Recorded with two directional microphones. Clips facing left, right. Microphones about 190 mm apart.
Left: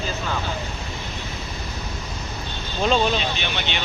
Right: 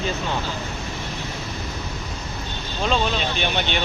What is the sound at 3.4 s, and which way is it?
Speech, 45° right (ahead or behind).